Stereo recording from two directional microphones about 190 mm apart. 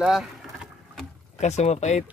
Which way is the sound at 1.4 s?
35° left (ahead or behind).